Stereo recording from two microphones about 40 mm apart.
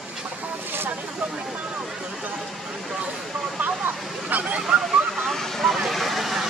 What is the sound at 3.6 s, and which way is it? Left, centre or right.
Speech, right.